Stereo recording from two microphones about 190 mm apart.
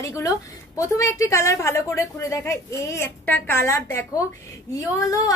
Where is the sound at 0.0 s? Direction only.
15° left (ahead or behind).